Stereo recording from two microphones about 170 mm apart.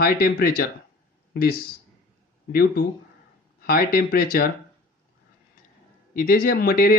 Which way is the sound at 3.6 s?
60° left (ahead or behind).